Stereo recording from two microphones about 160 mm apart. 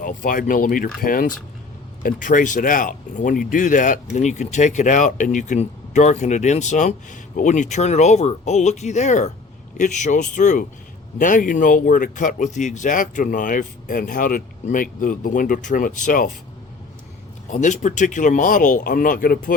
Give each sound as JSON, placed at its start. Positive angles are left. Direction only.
{"t": 0.0, "sound": "speech", "side_deg": 55}
{"t": 17.5, "sound": "speech", "side_deg": 50}